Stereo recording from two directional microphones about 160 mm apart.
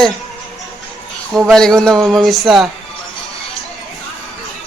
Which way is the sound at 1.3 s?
Centre (ahead or behind).